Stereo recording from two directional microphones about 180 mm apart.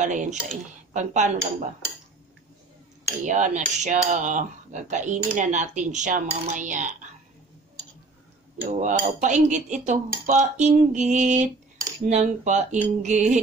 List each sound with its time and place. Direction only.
0.0 s cutlery: 45° right (ahead or behind)
0.9 s speech: 40° right (ahead or behind)
3.3 s cutlery: 45° right (ahead or behind)
8.6 s cutlery: 45° right (ahead or behind)
12.1 s speech: 40° right (ahead or behind)